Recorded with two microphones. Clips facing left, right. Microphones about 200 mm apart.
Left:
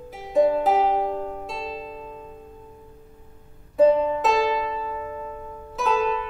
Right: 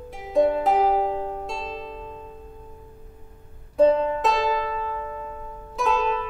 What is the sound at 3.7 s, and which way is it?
Music, 5° left (ahead or behind).